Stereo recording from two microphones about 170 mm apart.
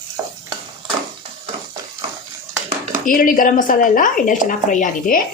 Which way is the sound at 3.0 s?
55° left (ahead or behind).